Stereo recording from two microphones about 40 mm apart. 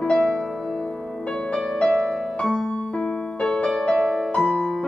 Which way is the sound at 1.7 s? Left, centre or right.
Centre.